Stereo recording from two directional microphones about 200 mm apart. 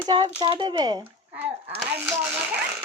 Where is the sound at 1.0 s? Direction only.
10° right (ahead or behind).